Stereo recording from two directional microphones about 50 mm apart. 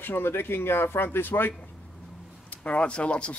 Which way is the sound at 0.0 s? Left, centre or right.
Left.